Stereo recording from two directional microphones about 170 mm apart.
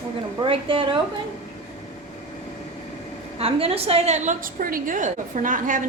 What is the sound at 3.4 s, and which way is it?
A woman's voice, 35° right (ahead or behind).